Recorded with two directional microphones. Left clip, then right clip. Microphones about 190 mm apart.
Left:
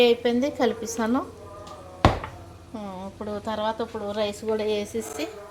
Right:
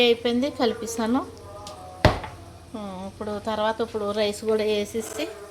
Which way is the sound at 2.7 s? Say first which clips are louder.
Right 1 dB; centre (ahead or behind).